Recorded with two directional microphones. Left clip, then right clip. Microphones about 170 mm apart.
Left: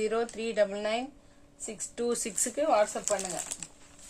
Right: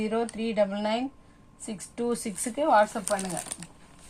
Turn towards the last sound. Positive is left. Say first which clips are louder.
# right 4 dB
turn(degrees=35)  # may be behind; listen again after turning